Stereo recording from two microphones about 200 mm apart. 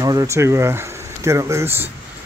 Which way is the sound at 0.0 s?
15° right (ahead or behind).